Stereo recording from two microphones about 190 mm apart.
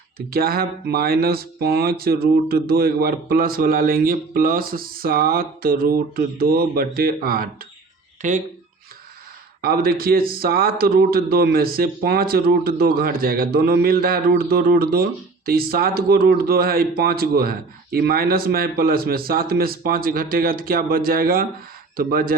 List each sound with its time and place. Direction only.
0.3 s speech: 50° right (ahead or behind)
8.2 s speech: 40° right (ahead or behind)
9.6 s speech: 50° right (ahead or behind)